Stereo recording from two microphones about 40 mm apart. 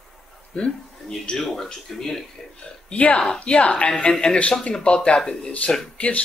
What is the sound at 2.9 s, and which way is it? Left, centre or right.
Speech, left.